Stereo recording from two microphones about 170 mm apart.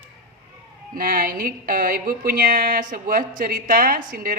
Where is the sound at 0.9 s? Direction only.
55° right (ahead or behind).